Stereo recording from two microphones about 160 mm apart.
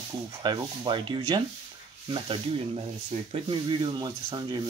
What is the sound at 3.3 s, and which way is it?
Speech, 30° right (ahead or behind).